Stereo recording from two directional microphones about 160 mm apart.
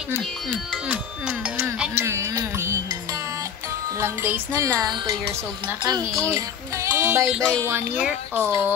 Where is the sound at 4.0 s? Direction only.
15° right (ahead or behind).